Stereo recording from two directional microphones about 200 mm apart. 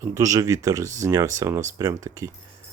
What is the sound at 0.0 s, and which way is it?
Speech, 15° right (ahead or behind).